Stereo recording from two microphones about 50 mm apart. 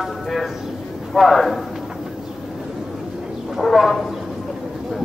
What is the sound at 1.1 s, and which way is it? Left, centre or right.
Speech, centre.